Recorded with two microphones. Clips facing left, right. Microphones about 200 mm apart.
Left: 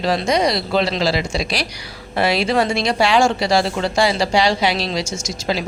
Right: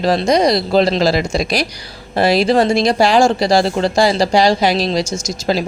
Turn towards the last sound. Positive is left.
turn(degrees=-35)  # may be behind; listen again after turning